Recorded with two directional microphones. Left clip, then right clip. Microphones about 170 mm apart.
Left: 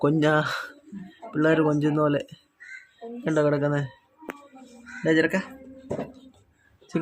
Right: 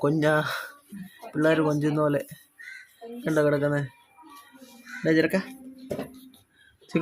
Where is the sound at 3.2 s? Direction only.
Centre (ahead or behind).